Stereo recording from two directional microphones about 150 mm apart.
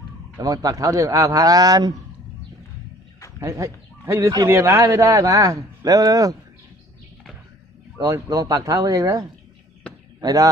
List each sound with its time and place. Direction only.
0.4 s speech: 25° right (ahead or behind)
3.3 s speech: 20° right (ahead or behind)
8.0 s speech: 20° right (ahead or behind)